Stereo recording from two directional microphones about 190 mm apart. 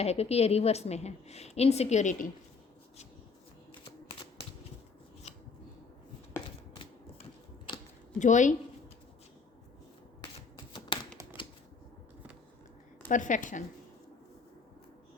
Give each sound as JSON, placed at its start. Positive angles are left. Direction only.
{"t": 0.0, "sound": "a woman's voice", "side_deg": 35}
{"t": 8.2, "sound": "a woman's voice", "side_deg": 40}
{"t": 10.7, "sound": "a sound", "side_deg": 25}
{"t": 13.1, "sound": "a woman's voice", "side_deg": 40}